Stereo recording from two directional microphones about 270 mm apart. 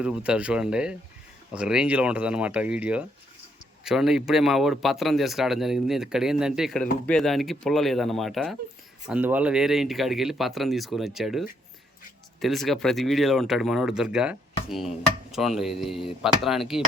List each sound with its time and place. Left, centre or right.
0.0 s speech: centre